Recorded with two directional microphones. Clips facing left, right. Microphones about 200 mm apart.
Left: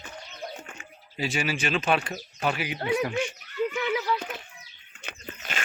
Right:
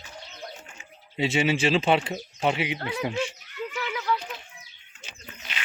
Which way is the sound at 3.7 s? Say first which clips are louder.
Right 3 dB; 20° left (ahead or behind).